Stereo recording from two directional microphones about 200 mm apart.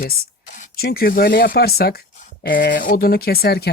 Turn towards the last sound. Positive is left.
turn(degrees=50)  # may be behind; listen again after turning